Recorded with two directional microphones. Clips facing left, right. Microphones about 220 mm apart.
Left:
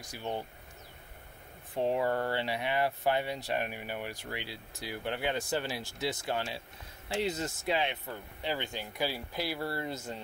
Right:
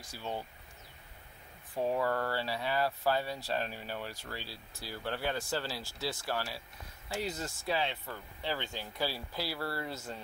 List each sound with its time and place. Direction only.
0.0 s speech: 15° left (ahead or behind)
1.8 s speech: 20° left (ahead or behind)